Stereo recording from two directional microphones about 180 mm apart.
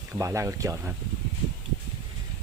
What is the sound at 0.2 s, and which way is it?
Speech, 15° right (ahead or behind).